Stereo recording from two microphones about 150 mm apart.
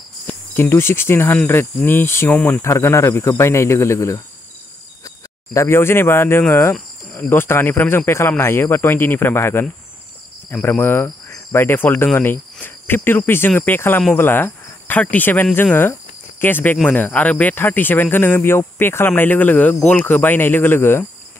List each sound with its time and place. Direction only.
0.3 s speech: 15° left (ahead or behind)